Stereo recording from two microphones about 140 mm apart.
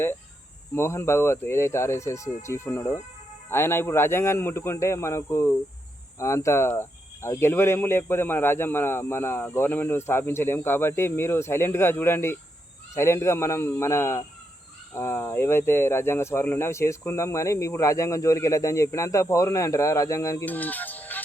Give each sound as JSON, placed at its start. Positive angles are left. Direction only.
{"t": 0.8, "sound": "speech", "side_deg": 20}
{"t": 20.4, "sound": "speech", "side_deg": 10}